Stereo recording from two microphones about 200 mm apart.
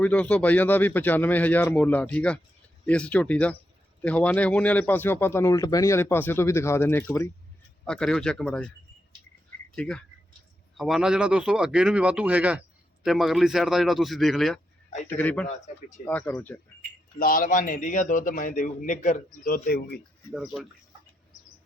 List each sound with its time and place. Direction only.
0.0 s speech: 5° left (ahead or behind)
9.7 s speech: 5° left (ahead or behind)
17.2 s a man's voice: 45° left (ahead or behind)